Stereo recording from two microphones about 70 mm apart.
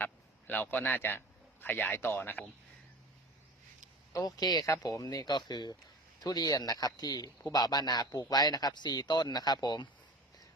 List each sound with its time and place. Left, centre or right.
0.0 s a sound: left
1.6 s speech: left
4.1 s a man's voice: left
4.6 s speech: left
6.2 s a man's voice: left